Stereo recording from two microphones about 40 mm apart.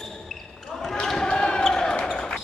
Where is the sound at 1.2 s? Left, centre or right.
Left.